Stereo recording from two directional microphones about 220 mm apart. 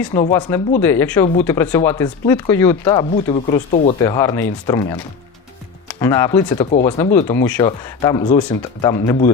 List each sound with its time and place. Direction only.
0.1 s speech: 10° left (ahead or behind)